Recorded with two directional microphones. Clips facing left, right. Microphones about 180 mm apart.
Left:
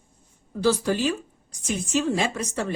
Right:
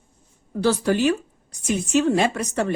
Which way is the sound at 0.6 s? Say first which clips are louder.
Right 3 dB; 65° right (ahead or behind).